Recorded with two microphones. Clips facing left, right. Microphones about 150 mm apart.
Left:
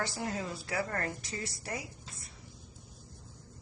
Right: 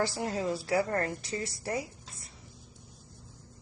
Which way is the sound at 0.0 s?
25° right (ahead or behind).